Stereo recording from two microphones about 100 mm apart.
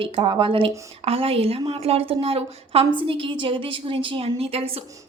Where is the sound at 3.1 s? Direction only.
60° right (ahead or behind); by 4.8 s 80° right.